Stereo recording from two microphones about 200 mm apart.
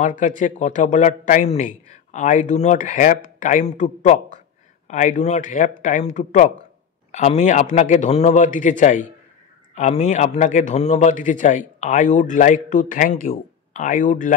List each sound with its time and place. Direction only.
0.0 s a man's voice: 40° left (ahead or behind)